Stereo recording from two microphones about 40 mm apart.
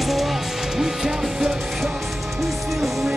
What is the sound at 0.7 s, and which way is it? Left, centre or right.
Music, centre.